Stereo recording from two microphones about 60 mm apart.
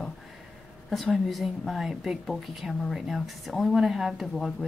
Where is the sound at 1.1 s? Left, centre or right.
Centre.